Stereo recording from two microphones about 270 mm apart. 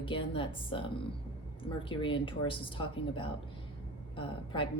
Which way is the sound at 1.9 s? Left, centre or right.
Centre.